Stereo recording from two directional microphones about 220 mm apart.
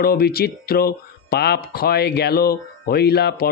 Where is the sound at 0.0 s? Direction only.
45° left (ahead or behind).